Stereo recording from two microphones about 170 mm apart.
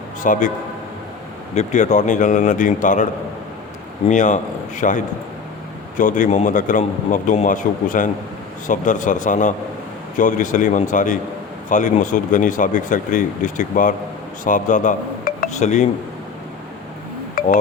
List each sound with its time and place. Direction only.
0.2 s speech: 50° left (ahead or behind)
1.5 s speech: 45° left (ahead or behind)
4.1 s speech: 45° left (ahead or behind)
17.4 s music: 60° left (ahead or behind)